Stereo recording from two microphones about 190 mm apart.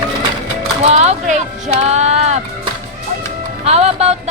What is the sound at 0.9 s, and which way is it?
Speech, 35° right (ahead or behind).